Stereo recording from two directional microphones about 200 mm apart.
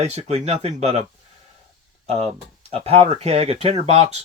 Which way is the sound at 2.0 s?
30° right (ahead or behind).